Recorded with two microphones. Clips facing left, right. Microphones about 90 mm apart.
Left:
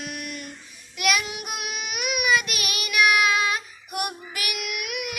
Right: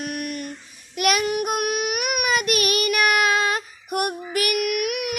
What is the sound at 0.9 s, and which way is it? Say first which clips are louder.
Child singing: right 5 dB; 45° right (ahead or behind).